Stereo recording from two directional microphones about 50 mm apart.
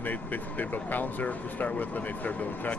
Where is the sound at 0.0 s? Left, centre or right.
Left.